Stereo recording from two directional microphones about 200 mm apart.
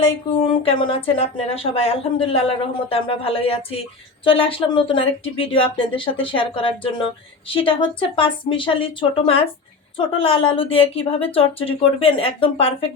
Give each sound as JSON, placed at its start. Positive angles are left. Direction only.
{"t": 0.0, "sound": "a woman's voice", "side_deg": 25}